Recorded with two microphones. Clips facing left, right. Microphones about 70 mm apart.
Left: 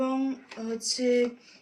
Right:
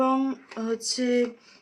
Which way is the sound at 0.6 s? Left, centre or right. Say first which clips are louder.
Right 2 dB; right.